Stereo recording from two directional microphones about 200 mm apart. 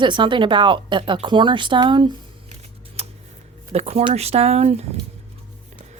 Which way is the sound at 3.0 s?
30° right (ahead or behind).